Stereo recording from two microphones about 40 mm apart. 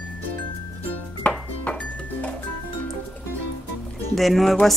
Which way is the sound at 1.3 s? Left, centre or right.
Left.